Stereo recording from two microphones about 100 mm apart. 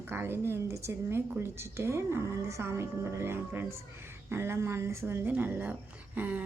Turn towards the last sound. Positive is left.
turn(degrees=-15)  # may be behind; listen again after turning